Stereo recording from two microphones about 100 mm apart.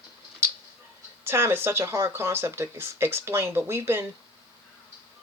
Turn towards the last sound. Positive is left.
turn(degrees=-25)  # may be behind; listen again after turning